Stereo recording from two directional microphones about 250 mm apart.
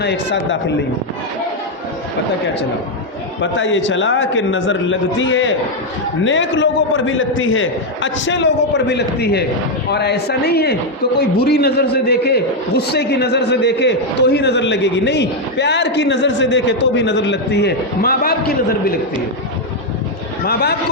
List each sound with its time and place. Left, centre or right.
0.0 s a man's voice: left
3.4 s a man's voice: left
20.4 s a man's voice: left